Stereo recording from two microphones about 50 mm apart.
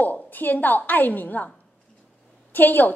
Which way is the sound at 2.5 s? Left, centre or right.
Left.